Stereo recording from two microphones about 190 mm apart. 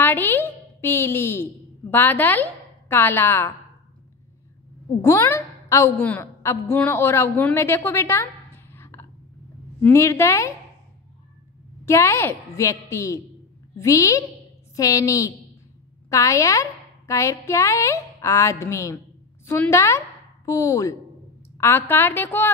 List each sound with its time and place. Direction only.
0.0 s a woman's voice: 10° left (ahead or behind)
5.0 s a woman's voice: 15° left (ahead or behind)
8.7 s a sound: 15° left (ahead or behind)
9.8 s a woman's voice: 10° left (ahead or behind)
11.8 s a woman's voice: 15° left (ahead or behind)